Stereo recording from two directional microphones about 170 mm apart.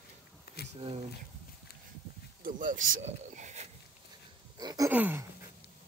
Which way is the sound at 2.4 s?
50° right (ahead or behind).